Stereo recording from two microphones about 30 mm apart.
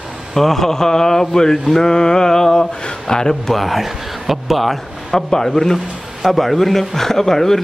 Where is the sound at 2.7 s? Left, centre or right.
Left.